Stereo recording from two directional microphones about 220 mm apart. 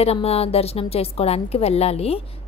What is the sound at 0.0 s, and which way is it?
A woman's voice, 25° left (ahead or behind).